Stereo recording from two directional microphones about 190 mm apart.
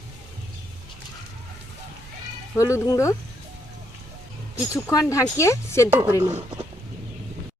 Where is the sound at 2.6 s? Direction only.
15° left (ahead or behind).